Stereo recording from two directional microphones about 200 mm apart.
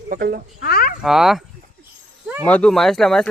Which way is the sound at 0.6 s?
50° left (ahead or behind).